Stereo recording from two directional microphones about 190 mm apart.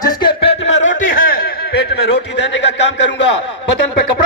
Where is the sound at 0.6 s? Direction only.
75° left (ahead or behind).